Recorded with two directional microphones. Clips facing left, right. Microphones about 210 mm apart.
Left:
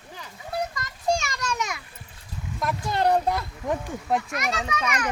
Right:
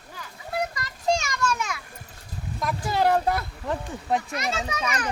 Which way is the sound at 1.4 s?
20° left (ahead or behind).